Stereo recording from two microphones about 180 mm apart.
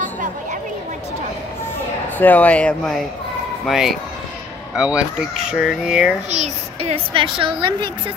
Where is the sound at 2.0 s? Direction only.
10° left (ahead or behind).